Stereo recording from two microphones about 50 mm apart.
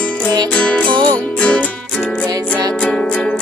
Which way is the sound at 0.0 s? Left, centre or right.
Left.